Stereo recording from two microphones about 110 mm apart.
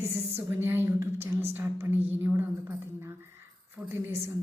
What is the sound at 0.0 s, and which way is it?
A woman's voice, 25° right (ahead or behind).